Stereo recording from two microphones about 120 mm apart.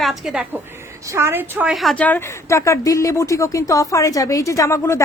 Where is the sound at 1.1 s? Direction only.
20° right (ahead or behind).